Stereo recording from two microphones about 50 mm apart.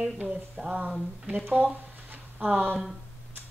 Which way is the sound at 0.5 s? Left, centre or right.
Right.